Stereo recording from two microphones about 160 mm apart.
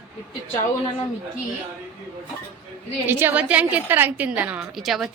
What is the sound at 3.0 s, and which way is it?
A woman's voice, 15° right (ahead or behind).